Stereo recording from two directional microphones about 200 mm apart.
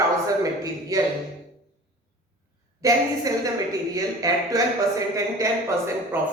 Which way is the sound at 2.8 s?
15° right (ahead or behind).